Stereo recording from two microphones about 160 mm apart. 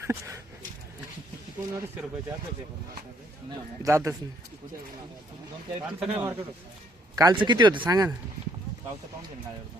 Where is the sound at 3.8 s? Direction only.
20° right (ahead or behind).